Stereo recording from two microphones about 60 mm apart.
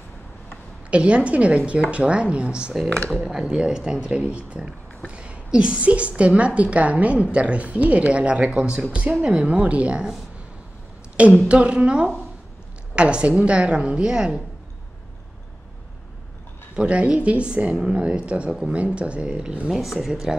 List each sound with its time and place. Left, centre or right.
0.8 s speech: centre
3.1 s speech: centre
11.4 s a woman's voice: centre
16.7 s speech: centre
19.7 s a woman's voice: centre